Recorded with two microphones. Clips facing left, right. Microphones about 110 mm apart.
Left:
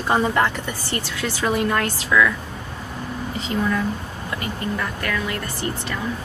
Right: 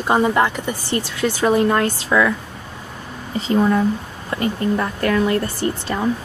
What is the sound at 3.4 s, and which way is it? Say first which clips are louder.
Speech: right 7 dB; 35° right (ahead or behind).